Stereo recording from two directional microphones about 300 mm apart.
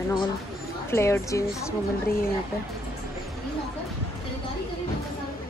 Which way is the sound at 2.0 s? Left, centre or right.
Left.